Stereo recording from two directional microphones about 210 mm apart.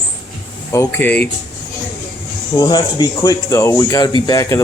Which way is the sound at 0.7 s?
10° left (ahead or behind).